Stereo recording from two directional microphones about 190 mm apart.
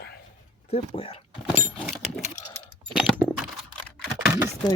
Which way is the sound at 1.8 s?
Centre (ahead or behind).